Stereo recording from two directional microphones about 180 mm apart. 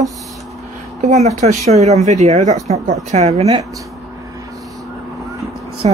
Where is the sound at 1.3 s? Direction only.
40° right (ahead or behind).